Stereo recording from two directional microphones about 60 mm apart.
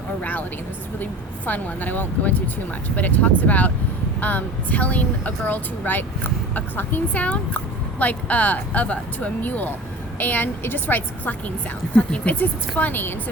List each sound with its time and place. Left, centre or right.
0.2 s a woman's voice: left